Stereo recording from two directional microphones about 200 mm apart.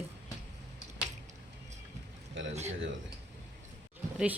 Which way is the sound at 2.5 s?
35° right (ahead or behind).